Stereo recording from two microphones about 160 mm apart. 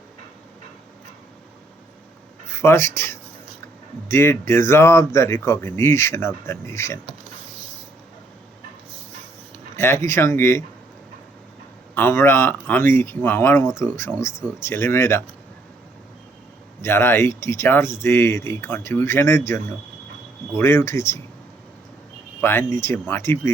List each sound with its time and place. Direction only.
2.5 s speech: 15° left (ahead or behind)
9.7 s speech: 15° left (ahead or behind)
11.9 s speech: 15° left (ahead or behind)
16.8 s speech: 15° left (ahead or behind)
22.4 s speech: 15° left (ahead or behind)